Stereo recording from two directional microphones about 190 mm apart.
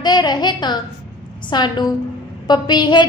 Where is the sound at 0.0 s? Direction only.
20° left (ahead or behind).